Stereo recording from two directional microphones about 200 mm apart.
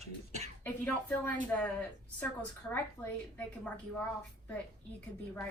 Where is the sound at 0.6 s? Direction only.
10° left (ahead or behind).